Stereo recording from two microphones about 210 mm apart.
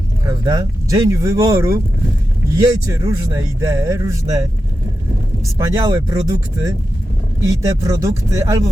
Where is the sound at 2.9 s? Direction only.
15° right (ahead or behind).